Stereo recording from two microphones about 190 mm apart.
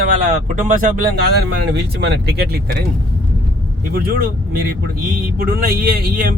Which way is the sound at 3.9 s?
50° right (ahead or behind).